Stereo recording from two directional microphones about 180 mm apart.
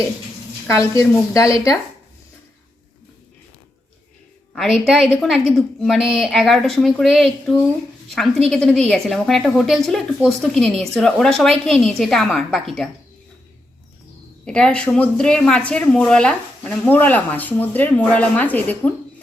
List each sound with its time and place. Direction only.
0.7 s speech: 15° left (ahead or behind)
4.5 s a woman's voice: centre (ahead or behind)
14.4 s speech: 5° left (ahead or behind)